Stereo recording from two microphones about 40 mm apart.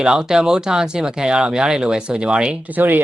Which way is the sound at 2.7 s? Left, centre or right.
Right.